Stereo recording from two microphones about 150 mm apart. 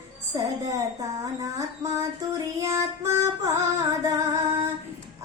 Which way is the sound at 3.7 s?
20° right (ahead or behind).